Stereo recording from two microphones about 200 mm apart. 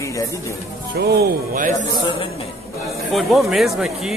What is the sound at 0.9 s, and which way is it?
Speech, 55° right (ahead or behind).